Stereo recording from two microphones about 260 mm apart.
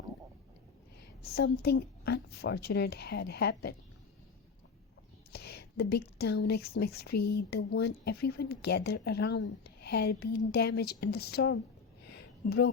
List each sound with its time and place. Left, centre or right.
1.2 s a woman's voice: left
5.3 s a woman's voice: left
12.1 s a sound: left